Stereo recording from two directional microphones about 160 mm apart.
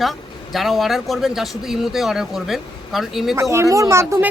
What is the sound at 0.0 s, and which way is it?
Speech, centre (ahead or behind).